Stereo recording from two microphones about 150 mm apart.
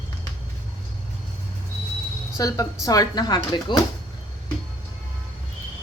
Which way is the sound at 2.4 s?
25° left (ahead or behind).